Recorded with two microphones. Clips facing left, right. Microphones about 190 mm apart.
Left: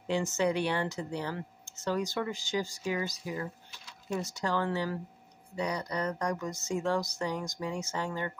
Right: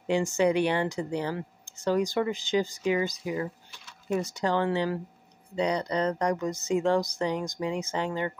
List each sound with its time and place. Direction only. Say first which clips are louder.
0.0 s speech: right 5 dB; 15° right (ahead or behind)
5.6 s speech: right 6 dB; 75° right (ahead or behind)
6.3 s speech: right 6 dB; 20° right (ahead or behind)